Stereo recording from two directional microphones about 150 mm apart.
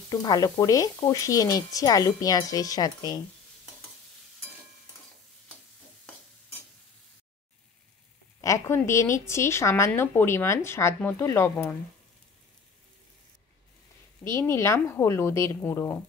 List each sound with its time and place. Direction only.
0.1 s speech: 25° left (ahead or behind)
8.4 s speech: 20° left (ahead or behind)
14.3 s speech: 15° left (ahead or behind)